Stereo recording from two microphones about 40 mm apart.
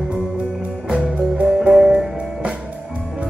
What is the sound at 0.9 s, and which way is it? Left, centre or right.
Music, right.